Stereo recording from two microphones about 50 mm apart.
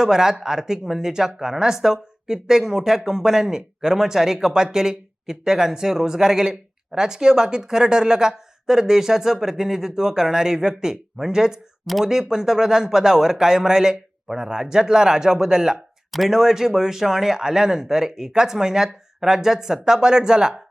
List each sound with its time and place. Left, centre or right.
0.0 s speech: centre